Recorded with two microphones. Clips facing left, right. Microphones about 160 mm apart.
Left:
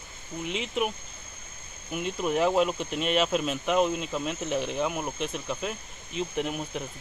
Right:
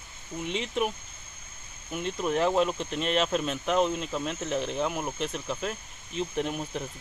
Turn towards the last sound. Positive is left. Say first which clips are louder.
# even
turn(degrees=5)  # may be behind; listen again after turning